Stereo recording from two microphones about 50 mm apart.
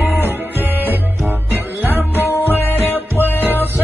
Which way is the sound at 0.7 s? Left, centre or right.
Right.